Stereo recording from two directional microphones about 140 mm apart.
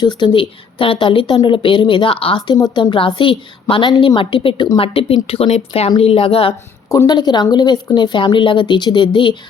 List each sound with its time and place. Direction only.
0.0 s a woman's voice: 30° left (ahead or behind)
6.8 s a woman's voice: 25° left (ahead or behind)